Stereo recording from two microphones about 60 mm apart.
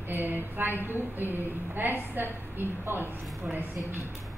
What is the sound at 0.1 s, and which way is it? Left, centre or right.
Speech, right.